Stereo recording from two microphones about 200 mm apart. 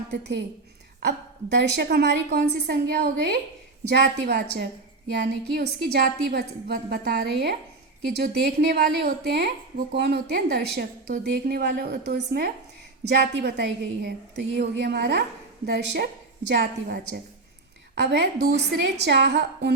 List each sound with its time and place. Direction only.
0.1 s a woman's voice: 60° right (ahead or behind)